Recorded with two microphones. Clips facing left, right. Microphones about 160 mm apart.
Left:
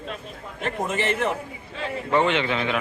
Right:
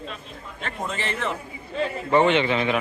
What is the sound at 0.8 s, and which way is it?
Speech, 20° left (ahead or behind).